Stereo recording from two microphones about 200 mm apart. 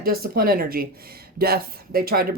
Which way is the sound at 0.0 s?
50° right (ahead or behind).